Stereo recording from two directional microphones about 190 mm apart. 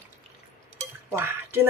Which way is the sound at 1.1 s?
10° right (ahead or behind).